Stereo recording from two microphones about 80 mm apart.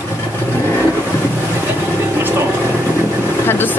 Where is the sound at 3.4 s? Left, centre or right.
Left.